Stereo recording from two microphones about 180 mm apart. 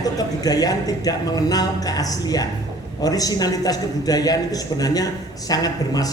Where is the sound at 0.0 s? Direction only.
20° left (ahead or behind).